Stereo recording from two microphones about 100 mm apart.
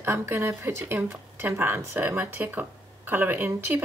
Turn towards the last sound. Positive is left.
turn(degrees=-20)  # may be behind; listen again after turning